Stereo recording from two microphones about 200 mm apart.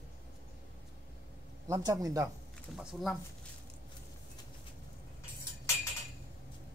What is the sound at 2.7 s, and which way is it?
Speech, centre (ahead or behind).